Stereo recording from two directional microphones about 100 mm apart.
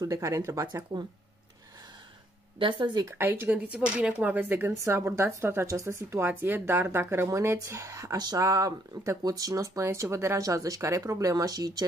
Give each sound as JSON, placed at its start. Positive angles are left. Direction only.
{"t": 0.0, "sound": "speech", "side_deg": -35}
{"t": 0.9, "sound": "speech", "side_deg": -50}
{"t": 2.6, "sound": "speech", "side_deg": -50}
{"t": 3.1, "sound": "speech", "side_deg": -25}